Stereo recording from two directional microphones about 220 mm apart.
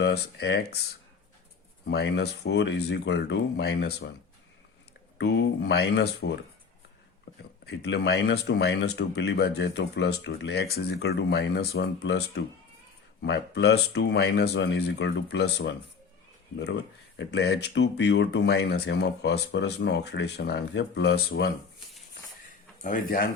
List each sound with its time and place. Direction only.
0.0 s speech: 50° left (ahead or behind)
1.9 s speech: 50° left (ahead or behind)
5.1 s speech: 50° left (ahead or behind)
7.6 s speech: 45° left (ahead or behind)
13.2 s speech: 50° left (ahead or behind)
17.2 s speech: 50° left (ahead or behind)
22.8 s speech: 40° left (ahead or behind)